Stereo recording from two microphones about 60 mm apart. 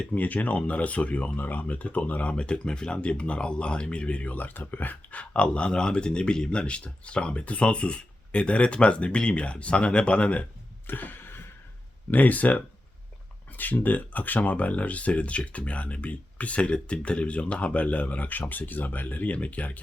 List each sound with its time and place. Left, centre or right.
0.0 s speech: left
5.3 s speech: centre
10.8 s a sound: left
12.1 s speech: left